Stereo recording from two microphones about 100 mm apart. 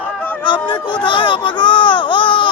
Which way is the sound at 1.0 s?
55° left (ahead or behind).